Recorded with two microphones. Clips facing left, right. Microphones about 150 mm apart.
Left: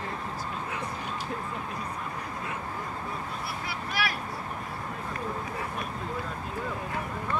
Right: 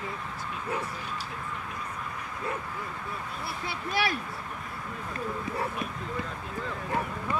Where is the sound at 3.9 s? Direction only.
25° right (ahead or behind).